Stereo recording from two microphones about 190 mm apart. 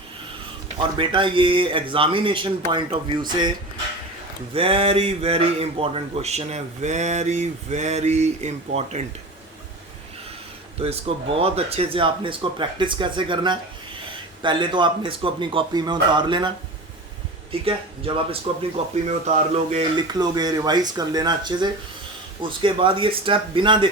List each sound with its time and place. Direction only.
0.8 s speech: 25° right (ahead or behind)
4.5 s speech: 30° right (ahead or behind)
10.8 s speech: 30° right (ahead or behind)
17.5 s speech: 30° right (ahead or behind)
20.0 s speech: 20° right (ahead or behind)